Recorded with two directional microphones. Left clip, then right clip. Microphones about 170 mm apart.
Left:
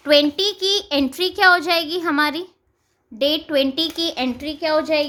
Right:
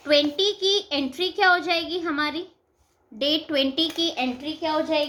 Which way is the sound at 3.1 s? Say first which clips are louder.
Left 4 dB; 40° left (ahead or behind).